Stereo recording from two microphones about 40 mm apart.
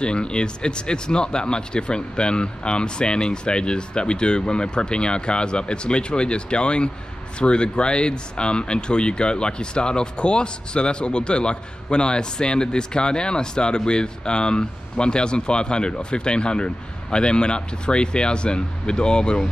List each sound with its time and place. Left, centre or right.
0.0 s speech: left